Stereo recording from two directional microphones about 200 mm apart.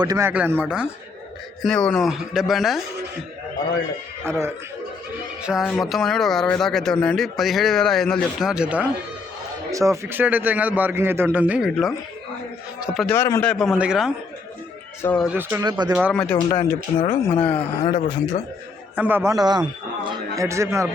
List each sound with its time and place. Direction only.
0.0 s a man's voice: 15° right (ahead or behind); by 2.8 s centre (ahead or behind)
4.3 s a man's voice: 10° right (ahead or behind)
13.1 s speech: 15° left (ahead or behind)
13.5 s speech: centre (ahead or behind)
15.0 s speech: 5° left (ahead or behind)
15.3 s a man's voice: 10° right (ahead or behind)
16.1 s speech: 5° left (ahead or behind)
16.5 s speech: 25° left (ahead or behind)
17.5 s speech: 35° left (ahead or behind)
18.9 s a man's voice: 10° right (ahead or behind)